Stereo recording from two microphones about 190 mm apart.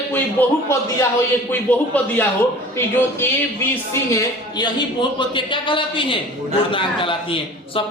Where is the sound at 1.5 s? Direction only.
10° left (ahead or behind).